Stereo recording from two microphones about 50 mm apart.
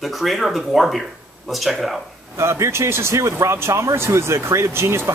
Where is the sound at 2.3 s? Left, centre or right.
Right.